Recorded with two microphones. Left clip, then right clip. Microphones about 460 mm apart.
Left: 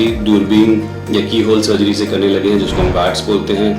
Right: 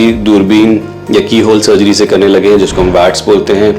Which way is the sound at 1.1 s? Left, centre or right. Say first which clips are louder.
Right 6 dB; right.